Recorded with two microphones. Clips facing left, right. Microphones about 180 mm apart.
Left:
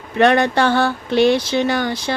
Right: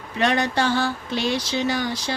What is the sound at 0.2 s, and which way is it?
Speech, 60° left (ahead or behind).